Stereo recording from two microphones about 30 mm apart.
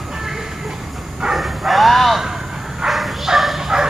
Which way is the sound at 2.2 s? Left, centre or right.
Centre.